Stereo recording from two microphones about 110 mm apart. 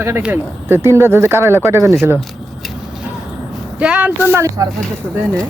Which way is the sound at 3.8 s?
10° right (ahead or behind).